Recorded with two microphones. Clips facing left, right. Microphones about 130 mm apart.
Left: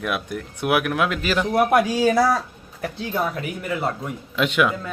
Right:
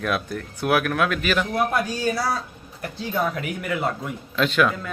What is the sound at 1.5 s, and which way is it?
Speech, 70° left (ahead or behind).